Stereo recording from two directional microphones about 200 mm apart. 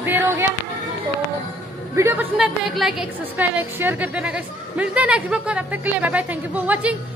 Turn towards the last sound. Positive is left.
turn(degrees=-10)  # may be behind; listen again after turning